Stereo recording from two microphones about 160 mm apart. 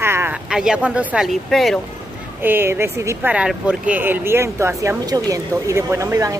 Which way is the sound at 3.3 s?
5° right (ahead or behind).